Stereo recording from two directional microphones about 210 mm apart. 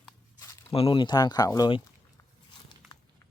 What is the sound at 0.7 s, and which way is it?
Speech, 25° left (ahead or behind).